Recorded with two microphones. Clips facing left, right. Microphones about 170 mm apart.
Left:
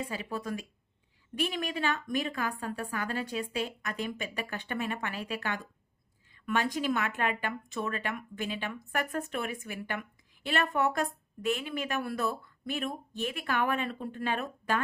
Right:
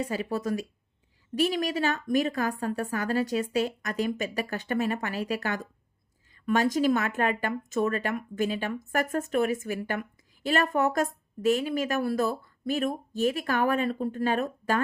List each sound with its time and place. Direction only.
0.0 s a woman's voice: 45° right (ahead or behind)